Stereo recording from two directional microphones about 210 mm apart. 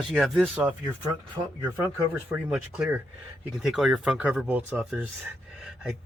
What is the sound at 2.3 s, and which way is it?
Speech, 5° right (ahead or behind).